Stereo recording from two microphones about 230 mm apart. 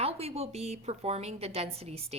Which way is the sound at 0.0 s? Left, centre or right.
Right.